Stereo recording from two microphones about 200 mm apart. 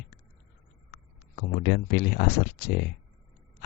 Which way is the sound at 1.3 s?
55° left (ahead or behind).